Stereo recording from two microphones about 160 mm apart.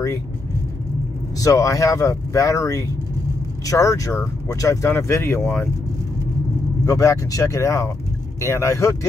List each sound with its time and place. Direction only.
1.4 s speech: 20° left (ahead or behind)
6.9 s speech: 20° left (ahead or behind)